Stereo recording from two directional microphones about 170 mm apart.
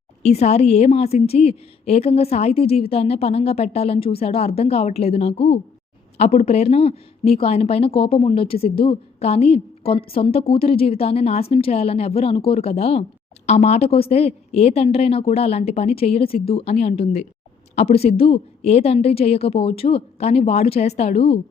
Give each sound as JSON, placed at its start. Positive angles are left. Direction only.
{"t": 0.2, "sound": "speech", "side_deg": 40}